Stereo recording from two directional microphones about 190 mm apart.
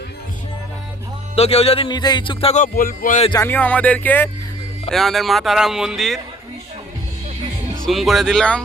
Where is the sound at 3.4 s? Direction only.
10° left (ahead or behind).